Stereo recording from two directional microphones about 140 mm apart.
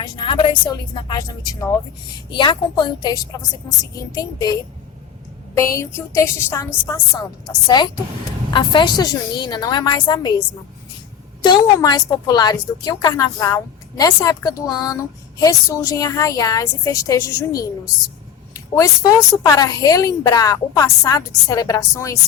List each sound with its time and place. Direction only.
0.0 s a woman's voice: 35° left (ahead or behind)
5.5 s a woman's voice: 20° left (ahead or behind)
7.2 s a woman's voice: 30° left (ahead or behind)
11.4 s a woman's voice: 30° left (ahead or behind)